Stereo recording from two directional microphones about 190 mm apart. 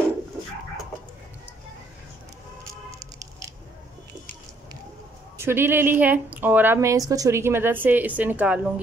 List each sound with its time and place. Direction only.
2.9 s squish: 15° right (ahead or behind)
5.4 s a woman's voice: 10° right (ahead or behind)